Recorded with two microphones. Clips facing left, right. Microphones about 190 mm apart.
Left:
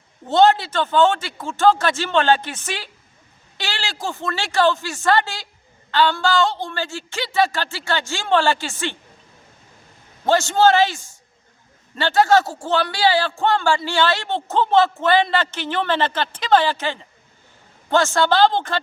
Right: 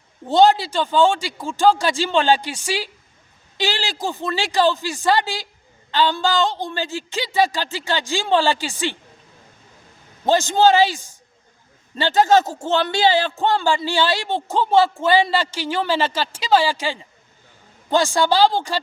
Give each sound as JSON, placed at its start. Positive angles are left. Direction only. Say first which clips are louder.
{"t": 0.3, "sound": "a man's voice", "louder": "right 1 dB", "side_deg": -15}
{"t": 10.2, "sound": "a man's voice", "louder": "even", "side_deg": -15}